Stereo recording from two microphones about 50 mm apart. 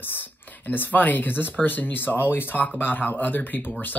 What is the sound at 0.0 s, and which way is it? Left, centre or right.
Speech, left.